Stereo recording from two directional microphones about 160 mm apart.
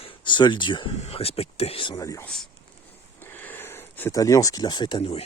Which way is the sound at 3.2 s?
10° left (ahead or behind).